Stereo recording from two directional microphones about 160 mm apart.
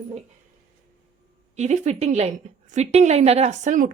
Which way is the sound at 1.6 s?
45° right (ahead or behind).